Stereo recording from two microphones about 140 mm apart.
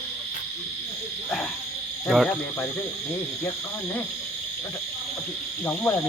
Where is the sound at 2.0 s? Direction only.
Centre (ahead or behind).